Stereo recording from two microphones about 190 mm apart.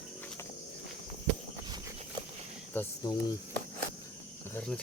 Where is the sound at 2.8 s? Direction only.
20° left (ahead or behind).